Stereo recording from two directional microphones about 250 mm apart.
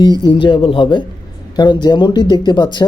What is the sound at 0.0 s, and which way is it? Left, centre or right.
Speech, centre.